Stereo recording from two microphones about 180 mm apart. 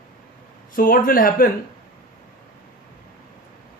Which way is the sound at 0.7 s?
50° left (ahead or behind).